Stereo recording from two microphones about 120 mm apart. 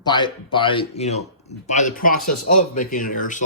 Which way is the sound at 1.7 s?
85° left.